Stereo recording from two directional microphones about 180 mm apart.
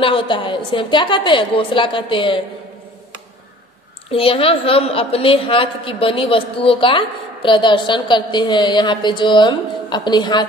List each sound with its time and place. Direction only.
0.0 s a woman's voice: 30° left (ahead or behind)
4.1 s a woman's voice: 30° left (ahead or behind)